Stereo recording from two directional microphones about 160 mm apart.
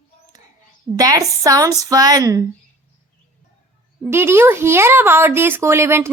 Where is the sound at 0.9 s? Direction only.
20° right (ahead or behind).